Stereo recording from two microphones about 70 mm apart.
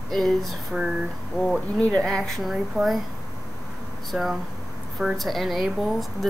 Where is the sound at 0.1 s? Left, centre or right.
Centre.